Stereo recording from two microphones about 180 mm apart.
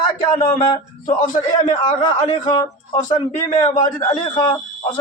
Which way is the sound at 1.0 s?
45° left (ahead or behind).